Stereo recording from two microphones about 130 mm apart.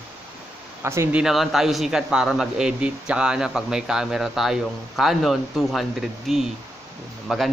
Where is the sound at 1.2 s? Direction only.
5° right (ahead or behind).